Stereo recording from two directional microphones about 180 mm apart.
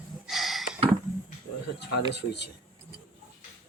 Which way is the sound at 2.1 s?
70° left (ahead or behind).